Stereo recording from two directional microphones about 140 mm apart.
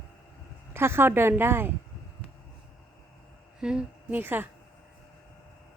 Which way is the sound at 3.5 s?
5° right (ahead or behind).